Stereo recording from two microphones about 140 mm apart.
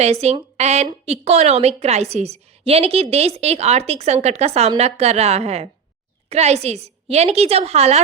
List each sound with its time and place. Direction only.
0.0 s a woman's voice: 50° right (ahead or behind)